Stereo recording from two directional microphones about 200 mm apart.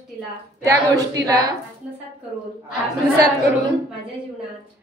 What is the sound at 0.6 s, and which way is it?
Speech, 15° right (ahead or behind).